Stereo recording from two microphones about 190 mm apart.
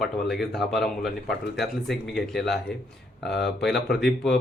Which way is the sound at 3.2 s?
60° left (ahead or behind).